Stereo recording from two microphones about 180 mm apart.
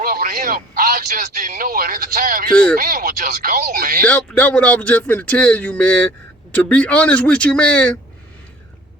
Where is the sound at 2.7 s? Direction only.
55° right (ahead or behind).